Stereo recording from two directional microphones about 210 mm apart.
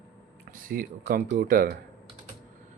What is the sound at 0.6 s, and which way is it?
Speech, 40° right (ahead or behind).